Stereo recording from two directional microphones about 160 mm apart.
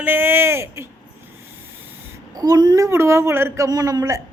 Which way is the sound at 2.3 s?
25° right (ahead or behind).